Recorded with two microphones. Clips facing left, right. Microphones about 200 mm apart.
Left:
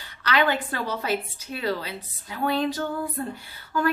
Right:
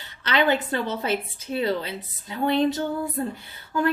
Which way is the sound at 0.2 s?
25° right (ahead or behind).